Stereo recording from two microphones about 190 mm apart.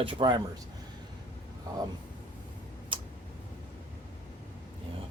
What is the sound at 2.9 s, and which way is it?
Tick-tock, 25° right (ahead or behind).